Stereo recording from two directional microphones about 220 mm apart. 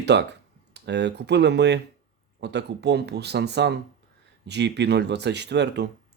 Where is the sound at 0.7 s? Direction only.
50° right (ahead or behind).